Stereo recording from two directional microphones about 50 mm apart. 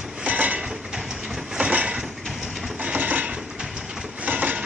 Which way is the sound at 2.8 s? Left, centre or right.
Right.